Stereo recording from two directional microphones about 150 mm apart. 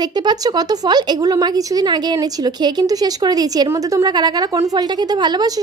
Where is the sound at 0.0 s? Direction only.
30° right (ahead or behind).